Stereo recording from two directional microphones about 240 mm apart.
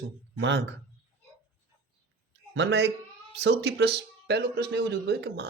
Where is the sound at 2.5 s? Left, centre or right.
Right.